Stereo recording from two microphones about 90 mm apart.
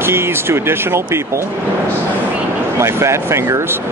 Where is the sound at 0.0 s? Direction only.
25° right (ahead or behind).